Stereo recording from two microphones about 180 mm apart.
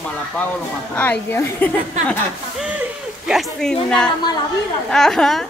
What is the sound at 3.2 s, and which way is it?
Speech, centre (ahead or behind).